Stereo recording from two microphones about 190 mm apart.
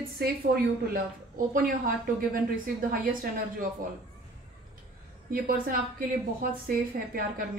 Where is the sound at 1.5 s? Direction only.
50° right (ahead or behind).